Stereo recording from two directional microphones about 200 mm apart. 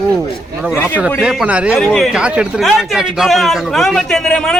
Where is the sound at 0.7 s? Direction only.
10° left (ahead or behind).